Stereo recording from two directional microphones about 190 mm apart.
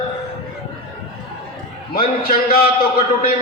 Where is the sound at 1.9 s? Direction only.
50° left (ahead or behind).